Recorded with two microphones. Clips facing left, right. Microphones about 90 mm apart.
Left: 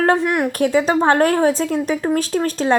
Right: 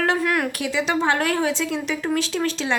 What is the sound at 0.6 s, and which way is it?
A woman's voice, 45° left (ahead or behind).